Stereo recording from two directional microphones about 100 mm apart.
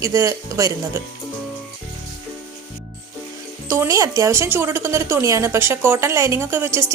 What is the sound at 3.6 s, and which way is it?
A woman's voice, 30° right (ahead or behind).